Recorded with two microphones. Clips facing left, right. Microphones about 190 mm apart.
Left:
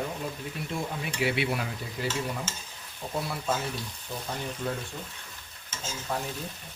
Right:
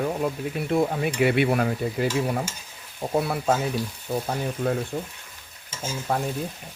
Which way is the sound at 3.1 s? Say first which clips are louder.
Right 8 dB; 60° right (ahead or behind).